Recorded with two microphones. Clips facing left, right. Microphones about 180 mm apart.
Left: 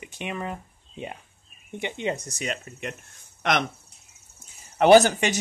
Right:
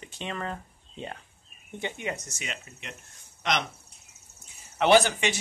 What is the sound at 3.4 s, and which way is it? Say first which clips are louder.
Speech: left 4 dB; 55° left (ahead or behind).